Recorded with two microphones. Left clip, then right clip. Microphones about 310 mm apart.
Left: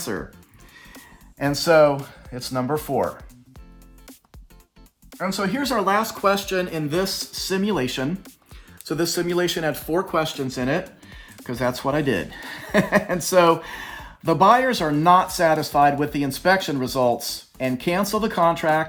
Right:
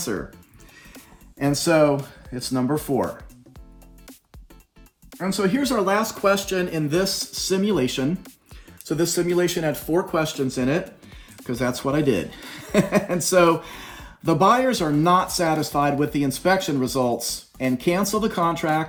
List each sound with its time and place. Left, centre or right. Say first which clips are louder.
1.4 s speech: left 3 dB; left
5.2 s speech: right 1 dB; left